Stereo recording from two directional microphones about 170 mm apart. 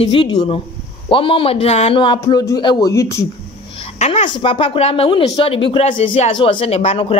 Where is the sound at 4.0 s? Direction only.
40° left (ahead or behind).